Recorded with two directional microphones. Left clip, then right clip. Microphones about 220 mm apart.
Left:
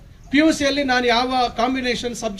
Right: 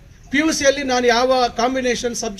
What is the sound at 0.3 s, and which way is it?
A man's voice, 60° left (ahead or behind).